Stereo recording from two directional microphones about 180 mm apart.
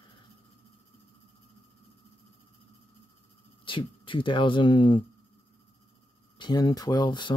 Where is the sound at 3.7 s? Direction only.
30° left (ahead or behind).